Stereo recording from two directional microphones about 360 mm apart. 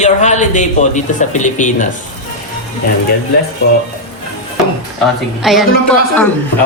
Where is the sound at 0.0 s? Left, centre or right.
Centre.